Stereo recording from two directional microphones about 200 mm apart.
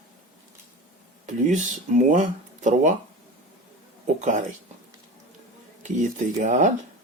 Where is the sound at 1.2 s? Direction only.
35° right (ahead or behind).